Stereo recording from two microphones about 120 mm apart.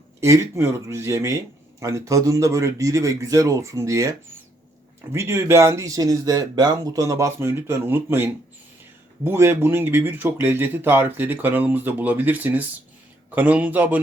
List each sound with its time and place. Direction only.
0.2 s speech: 20° right (ahead or behind)
5.1 s speech: 20° right (ahead or behind)